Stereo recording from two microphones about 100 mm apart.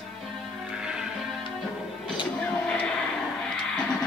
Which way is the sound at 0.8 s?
10° right (ahead or behind).